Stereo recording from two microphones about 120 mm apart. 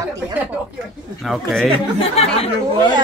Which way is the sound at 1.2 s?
Centre (ahead or behind).